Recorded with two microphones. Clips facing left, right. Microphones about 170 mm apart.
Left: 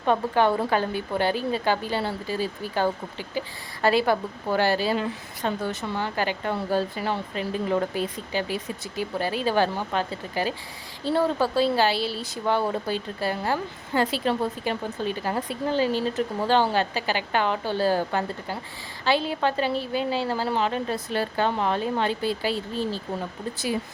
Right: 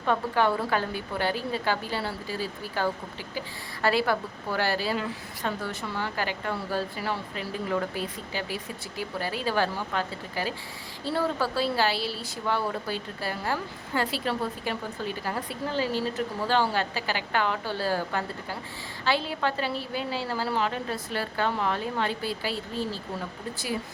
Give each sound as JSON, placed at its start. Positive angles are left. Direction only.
{"t": 0.0, "sound": "a woman's voice", "side_deg": 20}